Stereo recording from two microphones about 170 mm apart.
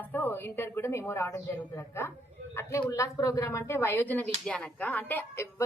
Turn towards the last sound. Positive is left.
turn(degrees=10)  # may be behind; listen again after turning